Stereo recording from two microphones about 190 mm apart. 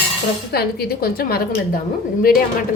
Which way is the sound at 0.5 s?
55° left (ahead or behind).